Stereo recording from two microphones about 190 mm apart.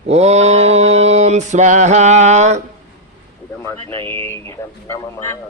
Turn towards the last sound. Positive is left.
turn(degrees=10)  # may be behind; listen again after turning